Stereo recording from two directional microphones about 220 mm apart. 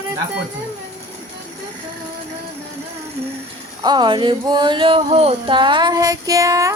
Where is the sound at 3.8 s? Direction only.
20° right (ahead or behind).